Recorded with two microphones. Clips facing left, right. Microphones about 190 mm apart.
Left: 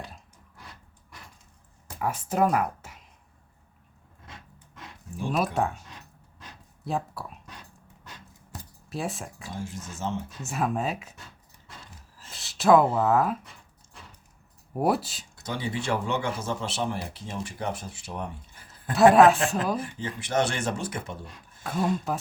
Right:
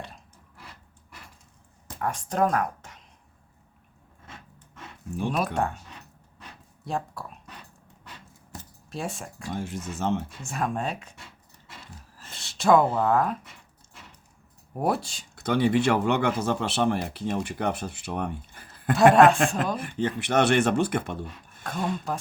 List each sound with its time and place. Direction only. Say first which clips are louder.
2.0 s speech: even; 5° left (ahead or behind)
5.5 s speech: even; centre (ahead or behind)
8.9 s speech: left 1 dB; centre (ahead or behind)
9.5 s speech: right 6 dB; 65° right (ahead or behind)
10.4 s speech: left 6 dB; 5° left (ahead or behind)
12.3 s a sound: left 1 dB; centre (ahead or behind)
14.8 s speech: left 1 dB; centre (ahead or behind)
15.4 s speech: right 10 dB; 65° right (ahead or behind)
18.9 s speech: even; centre (ahead or behind)
19.8 s speech: right 6 dB; 65° right (ahead or behind)
21.6 s speech: left 3 dB; 5° left (ahead or behind)